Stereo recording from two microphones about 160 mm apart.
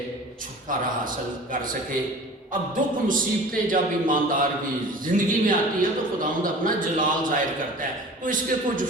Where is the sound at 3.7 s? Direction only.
60° right (ahead or behind).